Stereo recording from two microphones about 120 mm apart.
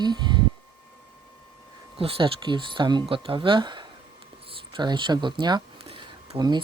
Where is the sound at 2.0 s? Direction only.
50° right (ahead or behind).